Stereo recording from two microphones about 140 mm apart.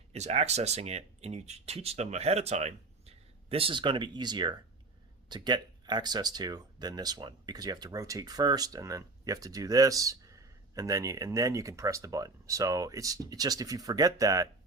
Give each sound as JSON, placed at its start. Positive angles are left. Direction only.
{"t": 0.1, "sound": "speech", "side_deg": -50}